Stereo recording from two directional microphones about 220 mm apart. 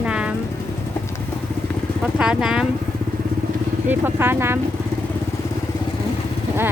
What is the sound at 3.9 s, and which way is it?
Speech, 10° right (ahead or behind).